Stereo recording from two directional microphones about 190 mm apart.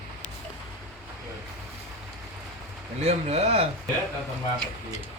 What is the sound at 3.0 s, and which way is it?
Speech, 35° right (ahead or behind).